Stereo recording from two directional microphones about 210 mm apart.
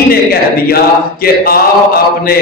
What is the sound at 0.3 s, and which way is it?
A man's voice, 45° left (ahead or behind).